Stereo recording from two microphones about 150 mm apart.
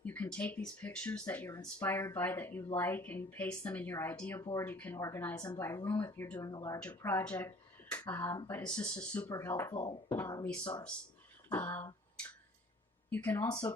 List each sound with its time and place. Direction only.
0.0 s speech: 10° left (ahead or behind)
6.4 s speech: 20° left (ahead or behind)
6.7 s speech: 10° left (ahead or behind)
9.7 s speech: 35° left (ahead or behind)
10.1 s speech: 20° left (ahead or behind)
11.5 s speech: 15° left (ahead or behind)
13.1 s speech: 10° left (ahead or behind)
13.3 s speech: 20° left (ahead or behind)